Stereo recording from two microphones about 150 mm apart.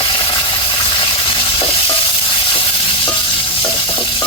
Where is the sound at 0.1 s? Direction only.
30° left (ahead or behind).